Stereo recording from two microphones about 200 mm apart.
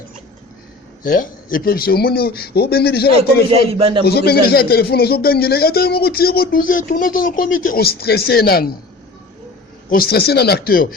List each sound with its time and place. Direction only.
1.0 s a man's voice: 45° left (ahead or behind)
3.7 s a man's voice: 30° right (ahead or behind)
4.0 s a man's voice: 55° left (ahead or behind)
9.9 s a man's voice: 50° left (ahead or behind)